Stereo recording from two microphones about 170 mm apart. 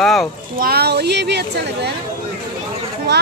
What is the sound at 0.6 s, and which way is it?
A woman's voice, 65° right (ahead or behind).